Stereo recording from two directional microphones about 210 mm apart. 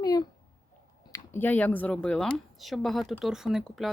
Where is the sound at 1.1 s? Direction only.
10° left (ahead or behind).